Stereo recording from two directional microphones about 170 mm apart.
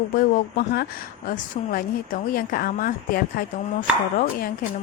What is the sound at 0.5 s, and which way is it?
Speech, 65° left (ahead or behind).